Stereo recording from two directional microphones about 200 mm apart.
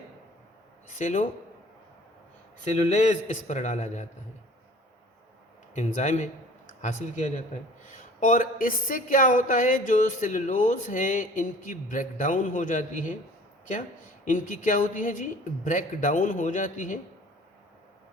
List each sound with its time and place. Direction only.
0.9 s speech: 40° left (ahead or behind)
2.6 s speech: 35° left (ahead or behind)
5.7 s speech: 35° left (ahead or behind)